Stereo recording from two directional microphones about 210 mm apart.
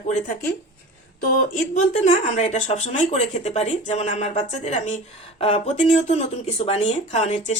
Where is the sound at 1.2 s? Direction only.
40° left (ahead or behind).